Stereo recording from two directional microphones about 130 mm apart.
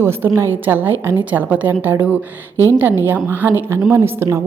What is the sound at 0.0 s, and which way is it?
A woman's voice, 20° right (ahead or behind).